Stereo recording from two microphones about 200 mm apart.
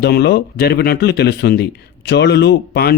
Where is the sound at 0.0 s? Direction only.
55° left (ahead or behind).